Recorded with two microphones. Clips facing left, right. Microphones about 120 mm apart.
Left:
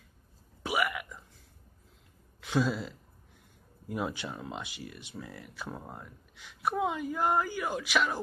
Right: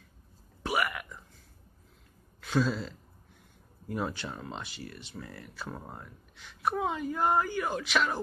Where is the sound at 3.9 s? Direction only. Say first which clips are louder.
Even; 10° left (ahead or behind).